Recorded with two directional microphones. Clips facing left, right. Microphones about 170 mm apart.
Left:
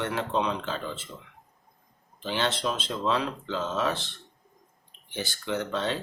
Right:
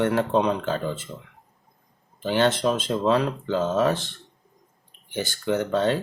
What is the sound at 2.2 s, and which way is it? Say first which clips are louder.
Speech: right 7 dB; 50° right (ahead or behind).